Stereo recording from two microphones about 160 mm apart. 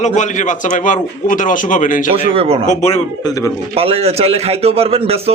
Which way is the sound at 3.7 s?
35° right (ahead or behind).